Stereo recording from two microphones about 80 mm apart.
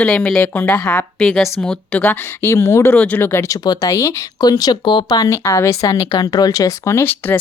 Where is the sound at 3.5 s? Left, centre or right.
Left.